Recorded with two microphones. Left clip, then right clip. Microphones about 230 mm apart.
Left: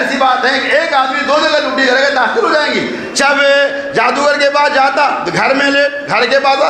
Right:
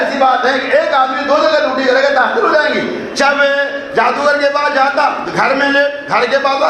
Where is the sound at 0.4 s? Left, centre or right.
Left.